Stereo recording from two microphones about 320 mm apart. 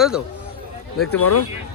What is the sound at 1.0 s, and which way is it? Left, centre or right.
Speech, left.